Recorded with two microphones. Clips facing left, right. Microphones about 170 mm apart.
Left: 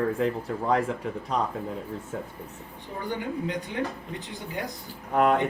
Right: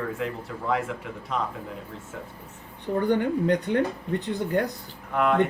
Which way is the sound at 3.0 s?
60° right (ahead or behind).